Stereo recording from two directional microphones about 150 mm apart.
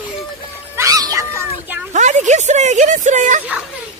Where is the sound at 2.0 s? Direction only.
50° right (ahead or behind).